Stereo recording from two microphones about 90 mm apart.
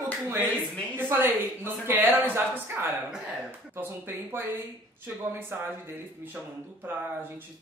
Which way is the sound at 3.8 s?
20° right (ahead or behind).